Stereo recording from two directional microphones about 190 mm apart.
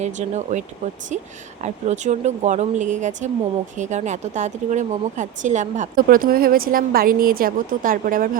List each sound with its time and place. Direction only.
0.0 s speech: 40° right (ahead or behind)